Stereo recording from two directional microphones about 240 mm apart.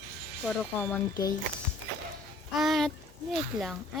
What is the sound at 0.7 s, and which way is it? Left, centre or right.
Speech, centre.